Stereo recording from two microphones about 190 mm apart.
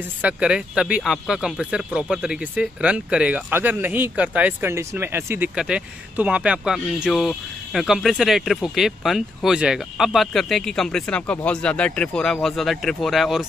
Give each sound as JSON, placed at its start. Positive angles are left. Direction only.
{"t": 0.2, "sound": "speech", "side_deg": -5}